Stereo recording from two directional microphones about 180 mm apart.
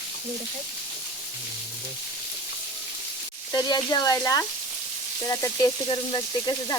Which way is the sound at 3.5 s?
20° left (ahead or behind).